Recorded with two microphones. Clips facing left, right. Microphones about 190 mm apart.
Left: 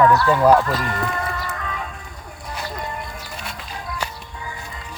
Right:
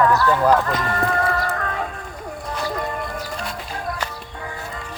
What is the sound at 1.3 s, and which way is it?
Music, 50° right (ahead or behind).